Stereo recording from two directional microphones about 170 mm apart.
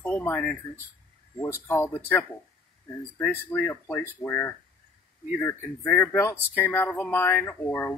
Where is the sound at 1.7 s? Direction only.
15° left (ahead or behind).